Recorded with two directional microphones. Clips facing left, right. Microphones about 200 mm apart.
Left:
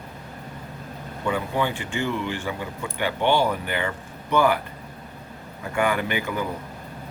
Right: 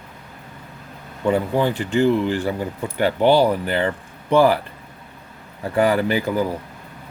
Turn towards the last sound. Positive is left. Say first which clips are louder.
# right 6 dB
turn(degrees=-35)  # may be behind; listen again after turning